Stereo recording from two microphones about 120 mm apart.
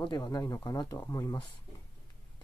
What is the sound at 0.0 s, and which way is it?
Speech, 35° left (ahead or behind).